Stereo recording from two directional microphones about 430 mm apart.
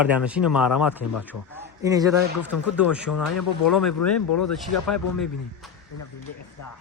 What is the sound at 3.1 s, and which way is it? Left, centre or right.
Speech, left.